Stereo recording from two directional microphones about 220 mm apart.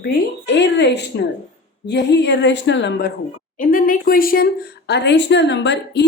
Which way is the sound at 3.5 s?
40° left (ahead or behind).